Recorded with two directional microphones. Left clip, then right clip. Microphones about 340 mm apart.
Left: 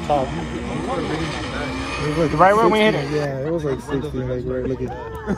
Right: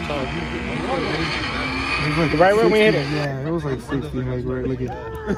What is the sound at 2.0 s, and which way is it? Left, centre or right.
Speech, left.